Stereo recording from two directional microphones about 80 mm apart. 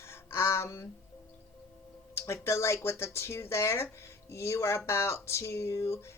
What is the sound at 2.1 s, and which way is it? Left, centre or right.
Speech, left.